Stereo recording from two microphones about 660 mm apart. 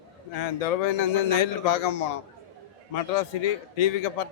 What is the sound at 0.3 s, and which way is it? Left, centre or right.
A man's voice, left.